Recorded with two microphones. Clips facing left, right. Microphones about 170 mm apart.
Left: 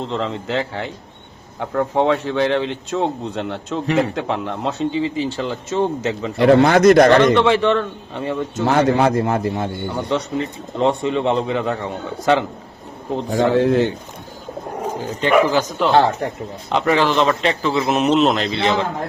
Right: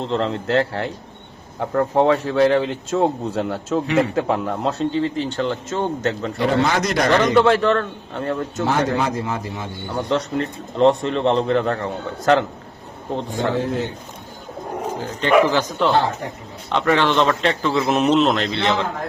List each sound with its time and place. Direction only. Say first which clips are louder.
0.0 s speech: right 2 dB; centre (ahead or behind)
6.4 s a man's voice: left 8 dB; 55° left (ahead or behind)
7.3 s speech: even; centre (ahead or behind)
8.6 s a man's voice: left 5 dB; 60° left (ahead or behind)
9.9 s speech: right 3 dB; centre (ahead or behind)
13.3 s speech: left 8 dB; 80° left
15.2 s speech: even; 15° left (ahead or behind)